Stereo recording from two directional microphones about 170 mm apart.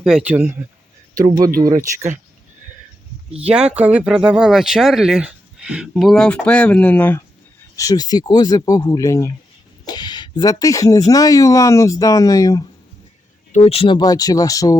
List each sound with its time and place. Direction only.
0.0 s speech: 5° right (ahead or behind)
1.1 s speech: 20° right (ahead or behind)
3.5 s speech: 5° right (ahead or behind); by 12.6 s 20° left (ahead or behind)
13.5 s speech: 40° left (ahead or behind); by 14.8 s 20° left (ahead or behind)